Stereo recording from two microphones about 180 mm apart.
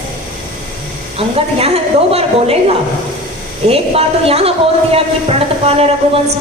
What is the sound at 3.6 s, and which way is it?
A woman's voice, 35° right (ahead or behind).